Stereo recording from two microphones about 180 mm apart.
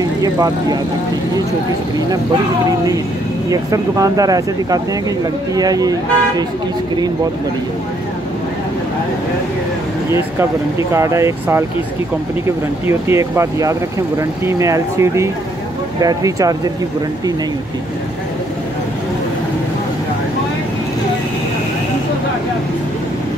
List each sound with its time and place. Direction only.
0.0 s speech: 20° right (ahead or behind)
3.4 s speech: 20° right (ahead or behind)
10.9 s speech: 15° right (ahead or behind)
12.8 s speech: 15° right (ahead or behind)